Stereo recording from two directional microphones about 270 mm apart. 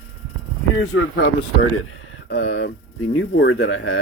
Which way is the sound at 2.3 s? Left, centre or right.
Left.